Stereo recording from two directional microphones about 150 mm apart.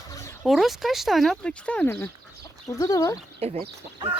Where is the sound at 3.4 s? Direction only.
40° right (ahead or behind).